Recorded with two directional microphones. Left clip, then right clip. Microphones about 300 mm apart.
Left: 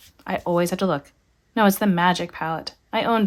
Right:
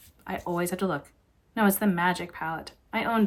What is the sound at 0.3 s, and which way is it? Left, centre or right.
A woman's voice, centre.